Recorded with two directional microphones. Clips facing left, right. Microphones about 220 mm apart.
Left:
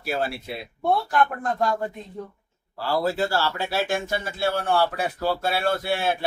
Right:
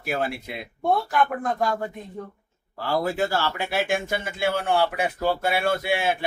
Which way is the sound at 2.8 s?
15° right (ahead or behind).